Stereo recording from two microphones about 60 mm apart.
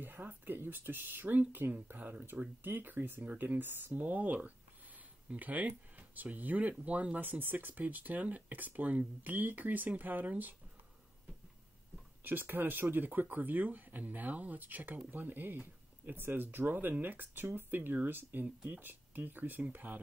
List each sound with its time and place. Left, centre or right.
0.0 s speech: right
12.2 s speech: right